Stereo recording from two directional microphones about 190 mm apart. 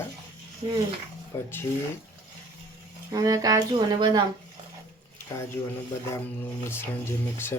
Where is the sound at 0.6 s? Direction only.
30° right (ahead or behind).